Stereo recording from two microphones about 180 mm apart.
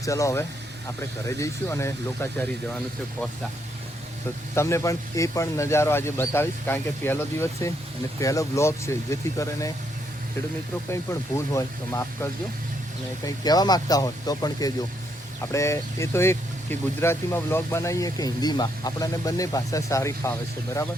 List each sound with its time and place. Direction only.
0.0 s speech: 15° left (ahead or behind)
4.5 s speech: 15° left (ahead or behind)
10.8 s speech: 15° left (ahead or behind)